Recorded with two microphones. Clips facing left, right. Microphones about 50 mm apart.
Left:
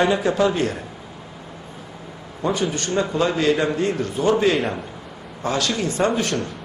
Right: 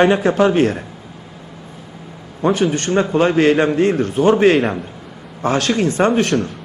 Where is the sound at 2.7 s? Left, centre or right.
Right.